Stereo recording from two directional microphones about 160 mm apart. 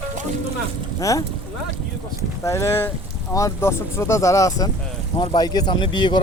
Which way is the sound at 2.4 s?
20° left (ahead or behind).